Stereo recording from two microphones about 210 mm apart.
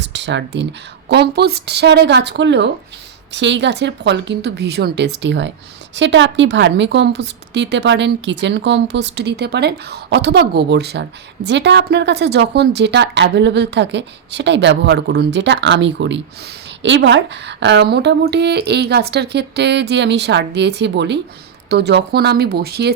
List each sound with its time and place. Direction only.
0.0 s a woman's voice: 55° right (ahead or behind)